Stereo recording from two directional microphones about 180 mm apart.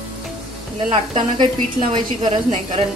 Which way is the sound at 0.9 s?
25° right (ahead or behind).